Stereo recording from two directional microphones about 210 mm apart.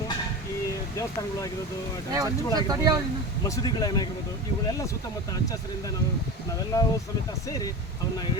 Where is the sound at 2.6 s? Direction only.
20° right (ahead or behind).